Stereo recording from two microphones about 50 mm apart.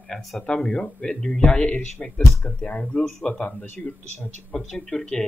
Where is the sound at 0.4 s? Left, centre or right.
Centre.